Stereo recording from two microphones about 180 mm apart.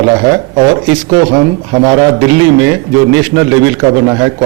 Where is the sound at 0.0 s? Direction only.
20° right (ahead or behind).